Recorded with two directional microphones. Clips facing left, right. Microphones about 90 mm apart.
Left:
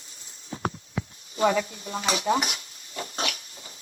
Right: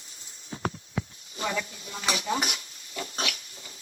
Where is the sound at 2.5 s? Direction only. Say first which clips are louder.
Even; 35° left (ahead or behind).